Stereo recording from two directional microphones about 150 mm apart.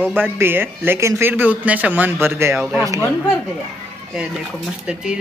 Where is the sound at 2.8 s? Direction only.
20° right (ahead or behind).